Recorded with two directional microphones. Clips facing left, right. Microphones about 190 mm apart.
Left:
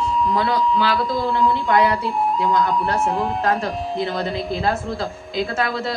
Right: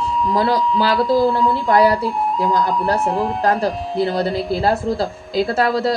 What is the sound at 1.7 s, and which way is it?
Speech, 35° right (ahead or behind).